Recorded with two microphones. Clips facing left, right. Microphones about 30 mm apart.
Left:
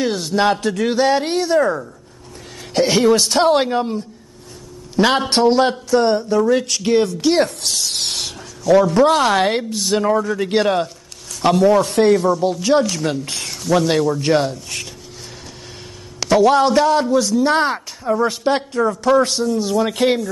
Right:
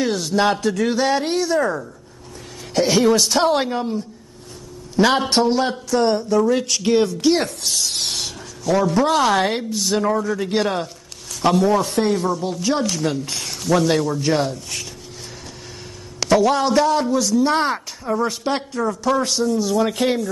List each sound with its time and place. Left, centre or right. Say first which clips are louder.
0.0 s a man's voice: left 1 dB; centre
1.6 s a man's voice: left 3 dB; centre
5.9 s a man's voice: left 1 dB; centre
7.4 s a man's voice: left 1 dB; centre
8.9 s a man's voice: left 3 dB; centre
16.2 s a man's voice: left 3 dB; centre